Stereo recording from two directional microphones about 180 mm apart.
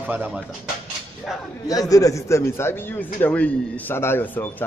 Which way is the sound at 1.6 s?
20° left (ahead or behind).